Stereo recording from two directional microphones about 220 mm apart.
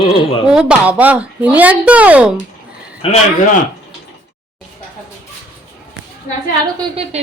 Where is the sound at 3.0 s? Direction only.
25° left (ahead or behind).